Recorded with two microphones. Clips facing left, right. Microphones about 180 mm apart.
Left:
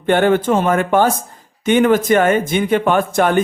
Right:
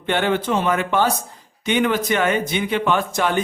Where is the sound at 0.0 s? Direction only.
45° left (ahead or behind).